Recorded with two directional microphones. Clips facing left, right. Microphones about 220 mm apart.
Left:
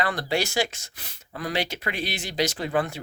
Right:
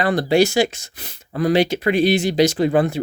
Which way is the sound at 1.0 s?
35° right (ahead or behind).